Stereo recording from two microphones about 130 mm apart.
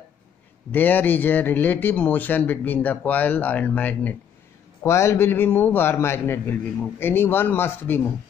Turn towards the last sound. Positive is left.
turn(degrees=15)  # may be behind; listen again after turning